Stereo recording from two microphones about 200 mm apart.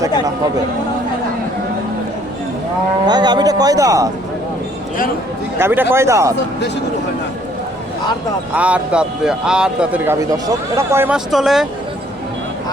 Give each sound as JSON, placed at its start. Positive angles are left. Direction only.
{"t": 3.1, "sound": "speech", "side_deg": -20}
{"t": 5.5, "sound": "speech", "side_deg": -10}
{"t": 8.5, "sound": "a man's voice", "side_deg": -5}